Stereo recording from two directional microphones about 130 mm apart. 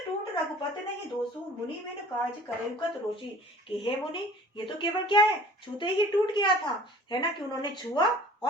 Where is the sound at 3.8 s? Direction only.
40° left (ahead or behind).